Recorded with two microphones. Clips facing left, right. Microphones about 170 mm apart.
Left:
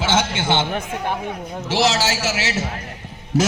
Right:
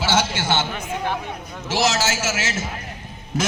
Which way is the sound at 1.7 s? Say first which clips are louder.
Left 2 dB; 35° left (ahead or behind).